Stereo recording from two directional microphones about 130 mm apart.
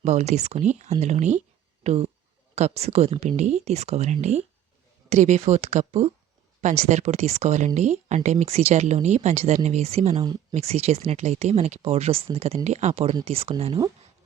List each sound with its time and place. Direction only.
0.0 s speech: 60° right (ahead or behind)